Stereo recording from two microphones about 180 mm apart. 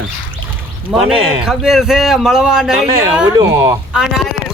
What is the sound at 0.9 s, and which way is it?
Speech, 5° right (ahead or behind).